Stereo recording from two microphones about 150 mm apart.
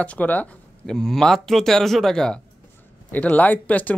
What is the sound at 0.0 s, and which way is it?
Speech, 10° left (ahead or behind).